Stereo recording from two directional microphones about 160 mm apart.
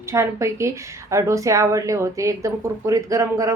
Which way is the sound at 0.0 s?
15° right (ahead or behind).